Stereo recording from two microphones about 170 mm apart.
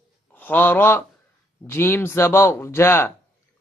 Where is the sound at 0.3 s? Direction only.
10° left (ahead or behind).